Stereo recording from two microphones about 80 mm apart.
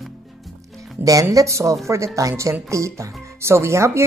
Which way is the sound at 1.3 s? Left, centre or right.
Right.